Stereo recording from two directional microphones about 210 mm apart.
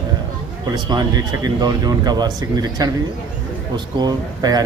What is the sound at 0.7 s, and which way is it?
Speech, 20° right (ahead or behind).